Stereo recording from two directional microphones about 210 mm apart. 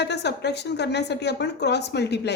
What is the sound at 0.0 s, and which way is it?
A woman's voice, 55° left (ahead or behind).